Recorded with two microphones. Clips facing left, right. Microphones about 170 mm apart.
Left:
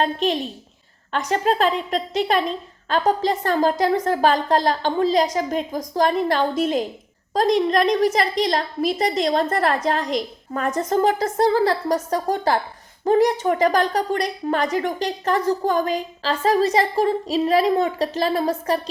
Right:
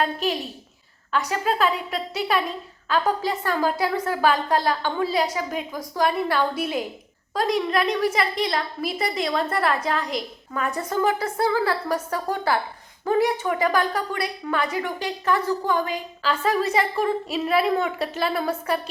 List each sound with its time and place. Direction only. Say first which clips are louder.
1.2 s a woman's voice: left 4 dB; 45° left (ahead or behind)